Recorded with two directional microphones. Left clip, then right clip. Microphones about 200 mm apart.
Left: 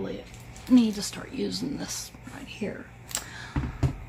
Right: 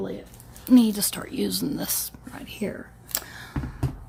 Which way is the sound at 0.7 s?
50° right (ahead or behind).